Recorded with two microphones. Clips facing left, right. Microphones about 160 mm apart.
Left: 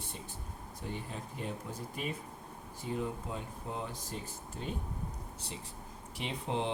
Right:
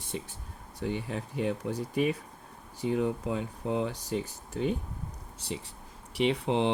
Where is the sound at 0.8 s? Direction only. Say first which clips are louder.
Right 9 dB; 80° right.